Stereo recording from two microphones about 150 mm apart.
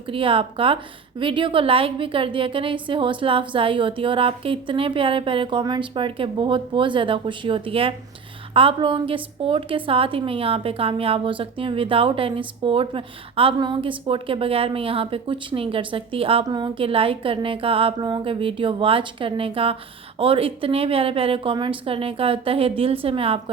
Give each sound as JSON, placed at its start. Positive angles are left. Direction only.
{"t": 0.1, "sound": "a woman's voice", "side_deg": -35}